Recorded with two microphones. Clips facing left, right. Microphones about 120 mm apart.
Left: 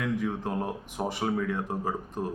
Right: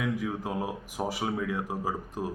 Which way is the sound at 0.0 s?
5° right (ahead or behind).